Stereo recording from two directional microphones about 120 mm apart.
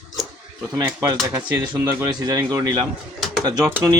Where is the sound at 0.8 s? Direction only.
25° right (ahead or behind).